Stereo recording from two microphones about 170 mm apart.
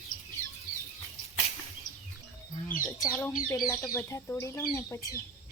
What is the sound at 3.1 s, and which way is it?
Speech, 15° left (ahead or behind).